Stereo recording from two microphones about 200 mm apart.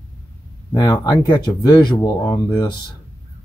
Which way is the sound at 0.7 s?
20° left (ahead or behind).